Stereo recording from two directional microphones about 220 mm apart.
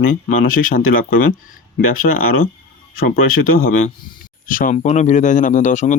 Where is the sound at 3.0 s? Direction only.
40° left (ahead or behind).